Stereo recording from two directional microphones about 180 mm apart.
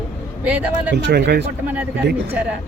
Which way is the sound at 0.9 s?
70° right (ahead or behind).